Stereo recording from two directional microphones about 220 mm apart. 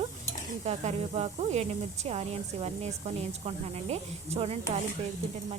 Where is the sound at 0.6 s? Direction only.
30° right (ahead or behind).